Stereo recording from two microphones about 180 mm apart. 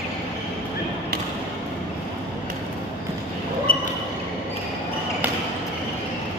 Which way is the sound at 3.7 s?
50° left (ahead or behind).